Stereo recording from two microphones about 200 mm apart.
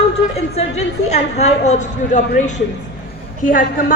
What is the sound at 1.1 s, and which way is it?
A woman's voice, 35° left (ahead or behind).